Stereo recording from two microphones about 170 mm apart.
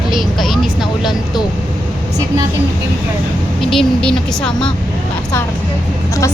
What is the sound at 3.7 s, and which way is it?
Speech, 5° left (ahead or behind).